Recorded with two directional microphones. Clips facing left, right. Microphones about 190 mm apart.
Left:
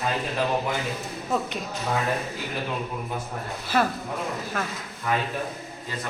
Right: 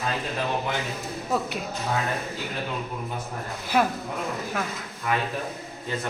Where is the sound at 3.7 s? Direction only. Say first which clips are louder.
Right 1 dB; 10° right (ahead or behind).